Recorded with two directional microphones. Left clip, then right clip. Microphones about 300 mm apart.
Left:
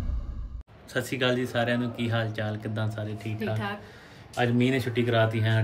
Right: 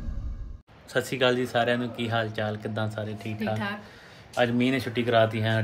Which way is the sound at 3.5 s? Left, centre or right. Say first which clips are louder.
Right 3 dB; centre.